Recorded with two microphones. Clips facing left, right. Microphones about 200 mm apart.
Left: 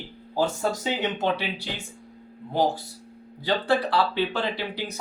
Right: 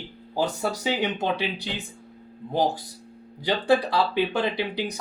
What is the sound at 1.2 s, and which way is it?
Speech, 15° right (ahead or behind).